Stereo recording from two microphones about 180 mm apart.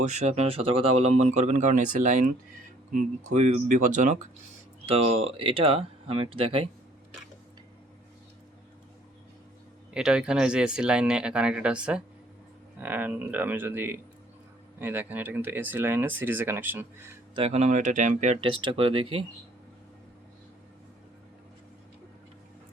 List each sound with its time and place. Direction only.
0.1 s speech: 40° right (ahead or behind)
9.9 s speech: 5° right (ahead or behind)
17.3 s speech: 35° right (ahead or behind)
18.3 s speech: 30° right (ahead or behind)